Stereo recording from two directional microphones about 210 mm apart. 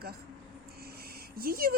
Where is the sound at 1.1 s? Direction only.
45° right (ahead or behind).